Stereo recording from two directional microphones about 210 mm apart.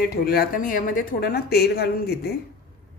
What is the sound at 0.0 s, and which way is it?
A woman's voice, 45° left (ahead or behind).